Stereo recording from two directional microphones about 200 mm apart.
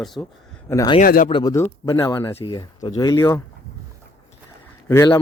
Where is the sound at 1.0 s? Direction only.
45° left (ahead or behind).